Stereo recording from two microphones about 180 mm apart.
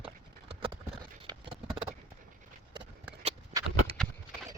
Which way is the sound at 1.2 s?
25° right (ahead or behind).